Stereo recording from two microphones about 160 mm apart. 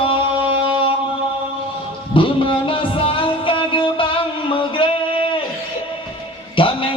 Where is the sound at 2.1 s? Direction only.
30° left (ahead or behind).